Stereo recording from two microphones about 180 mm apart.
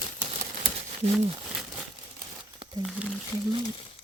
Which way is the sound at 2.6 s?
25° right (ahead or behind).